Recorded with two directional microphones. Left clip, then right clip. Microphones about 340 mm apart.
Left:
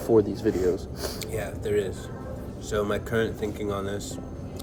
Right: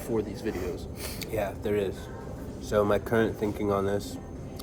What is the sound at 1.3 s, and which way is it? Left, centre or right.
Speech, centre.